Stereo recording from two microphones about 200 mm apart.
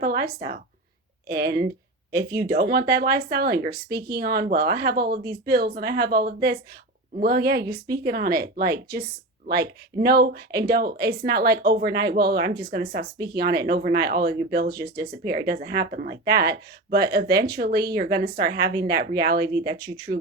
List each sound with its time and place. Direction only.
0.0 s a woman's voice: 50° right (ahead or behind)